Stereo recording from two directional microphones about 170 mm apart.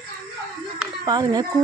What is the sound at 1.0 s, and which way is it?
Speech, 25° right (ahead or behind).